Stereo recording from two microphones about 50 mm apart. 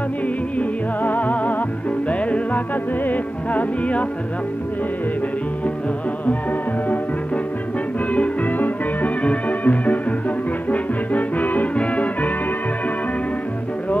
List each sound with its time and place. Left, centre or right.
0.6 s music: left
8.1 s music: left